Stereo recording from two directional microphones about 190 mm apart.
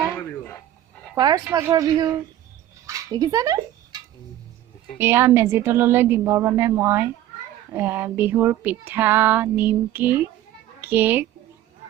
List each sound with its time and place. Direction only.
0.2 s radio: 10° left (ahead or behind)
1.1 s speech: 20° right (ahead or behind)
2.8 s dog: 20° right (ahead or behind)
4.9 s a child's voice: 10° right (ahead or behind)